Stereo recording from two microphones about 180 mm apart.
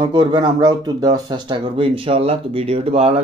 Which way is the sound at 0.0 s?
25° right (ahead or behind).